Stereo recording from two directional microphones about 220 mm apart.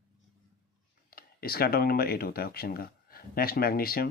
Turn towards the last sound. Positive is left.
turn(degrees=45)  # may be behind; listen again after turning